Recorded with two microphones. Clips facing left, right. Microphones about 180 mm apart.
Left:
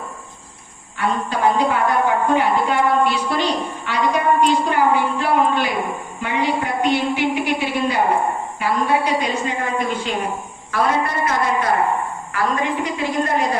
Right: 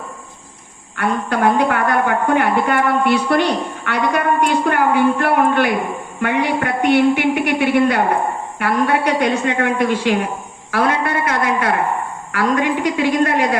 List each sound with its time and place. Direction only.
0.9 s a woman's voice: 60° right (ahead or behind); by 10.2 s 75° right (ahead or behind)
10.7 s a sound: 75° right (ahead or behind)
12.3 s a woman's voice: 75° right (ahead or behind)